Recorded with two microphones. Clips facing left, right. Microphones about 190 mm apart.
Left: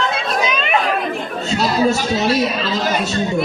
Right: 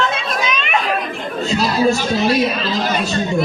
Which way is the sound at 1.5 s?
25° left (ahead or behind).